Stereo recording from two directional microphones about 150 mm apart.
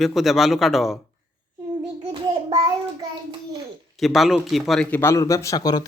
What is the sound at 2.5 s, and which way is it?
Child singing, 25° right (ahead or behind).